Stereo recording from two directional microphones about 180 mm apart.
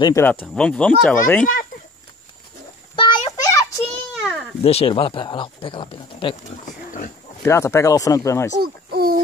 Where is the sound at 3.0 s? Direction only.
25° left (ahead or behind).